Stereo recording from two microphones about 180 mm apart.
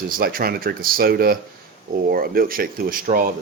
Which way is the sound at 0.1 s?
55° right (ahead or behind).